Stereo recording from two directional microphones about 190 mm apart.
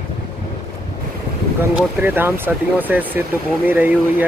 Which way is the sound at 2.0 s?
10° right (ahead or behind).